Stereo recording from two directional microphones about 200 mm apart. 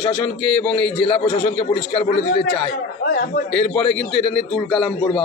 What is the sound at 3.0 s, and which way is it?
Speech, 60° left (ahead or behind).